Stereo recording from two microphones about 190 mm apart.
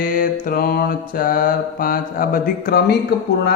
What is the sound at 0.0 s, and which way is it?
Mantra, 45° left (ahead or behind).